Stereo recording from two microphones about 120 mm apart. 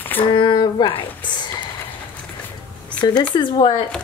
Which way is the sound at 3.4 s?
40° left (ahead or behind).